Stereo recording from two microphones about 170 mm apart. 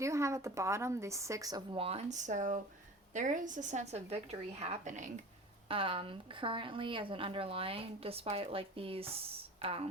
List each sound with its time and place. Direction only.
0.0 s a woman's voice: 15° right (ahead or behind); by 5.1 s 45° right (ahead or behind)
5.6 s a woman's voice: 30° right (ahead or behind)